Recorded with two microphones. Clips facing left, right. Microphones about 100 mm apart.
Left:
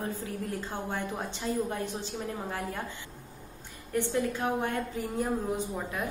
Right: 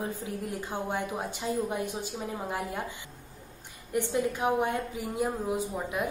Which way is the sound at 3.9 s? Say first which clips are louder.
Right 1 dB; 15° right (ahead or behind).